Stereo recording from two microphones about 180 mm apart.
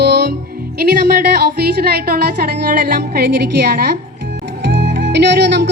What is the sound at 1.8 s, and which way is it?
A woman's voice, 60° right (ahead or behind).